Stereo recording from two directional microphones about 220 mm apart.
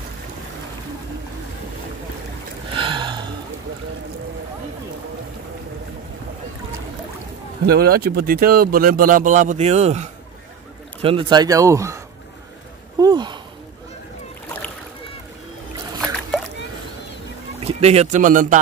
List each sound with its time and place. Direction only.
2.7 s gasp: 20° right (ahead or behind)
7.6 s a man's voice: 45° right (ahead or behind); by 12.0 s 15° right (ahead or behind)
13.0 s speech: 20° right (ahead or behind)
17.6 s speech: 30° right (ahead or behind)